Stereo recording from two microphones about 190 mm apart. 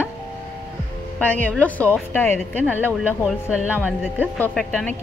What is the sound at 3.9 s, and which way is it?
Speech, 10° right (ahead or behind).